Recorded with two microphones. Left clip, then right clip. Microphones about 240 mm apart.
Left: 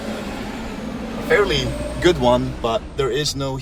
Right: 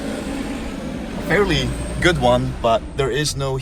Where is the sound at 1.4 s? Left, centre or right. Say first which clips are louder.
Even; left.